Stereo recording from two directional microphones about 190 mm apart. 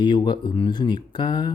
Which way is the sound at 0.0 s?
25° left (ahead or behind).